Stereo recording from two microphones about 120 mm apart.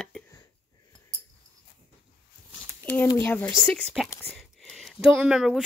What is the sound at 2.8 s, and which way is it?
Speech, 15° left (ahead or behind).